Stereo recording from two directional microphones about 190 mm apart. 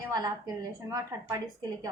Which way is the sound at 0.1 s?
20° right (ahead or behind).